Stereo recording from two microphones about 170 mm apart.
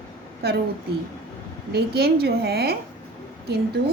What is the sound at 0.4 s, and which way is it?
Speech, 70° right (ahead or behind).